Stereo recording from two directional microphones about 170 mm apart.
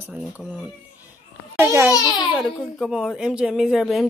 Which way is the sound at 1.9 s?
25° left (ahead or behind).